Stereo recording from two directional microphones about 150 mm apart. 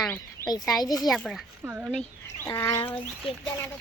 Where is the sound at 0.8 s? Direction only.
25° left (ahead or behind).